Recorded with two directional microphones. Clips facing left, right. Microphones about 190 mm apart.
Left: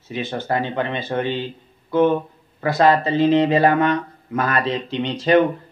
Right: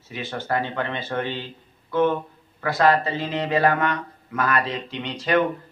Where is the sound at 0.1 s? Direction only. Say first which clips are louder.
Left 3 dB; 20° left (ahead or behind).